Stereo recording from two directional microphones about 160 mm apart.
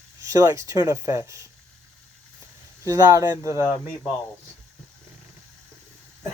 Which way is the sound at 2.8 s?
20° right (ahead or behind).